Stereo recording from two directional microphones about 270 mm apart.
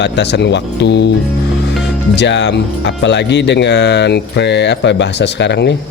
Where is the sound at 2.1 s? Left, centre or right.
Left.